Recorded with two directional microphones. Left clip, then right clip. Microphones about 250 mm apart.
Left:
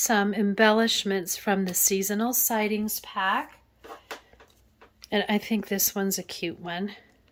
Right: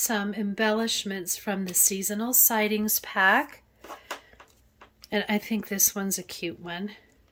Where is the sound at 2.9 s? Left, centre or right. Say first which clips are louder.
Right 7 dB; centre.